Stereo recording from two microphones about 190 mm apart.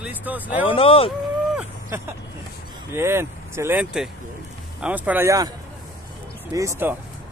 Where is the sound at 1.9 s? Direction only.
15° right (ahead or behind).